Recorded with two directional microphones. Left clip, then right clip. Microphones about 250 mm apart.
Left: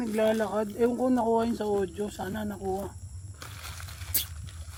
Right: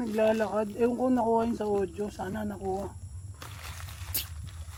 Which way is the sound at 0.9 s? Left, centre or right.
Left.